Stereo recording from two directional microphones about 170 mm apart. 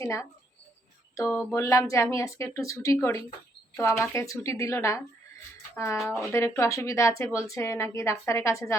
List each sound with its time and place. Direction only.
0.0 s a woman's voice: 20° left (ahead or behind)
1.3 s a sound: 5° left (ahead or behind)
1.5 s a woman's voice: 20° left (ahead or behind)